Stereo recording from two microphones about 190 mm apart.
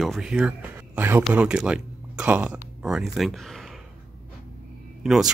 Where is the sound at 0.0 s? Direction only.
Centre (ahead or behind).